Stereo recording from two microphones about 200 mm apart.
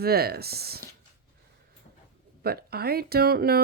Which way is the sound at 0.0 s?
50° right (ahead or behind).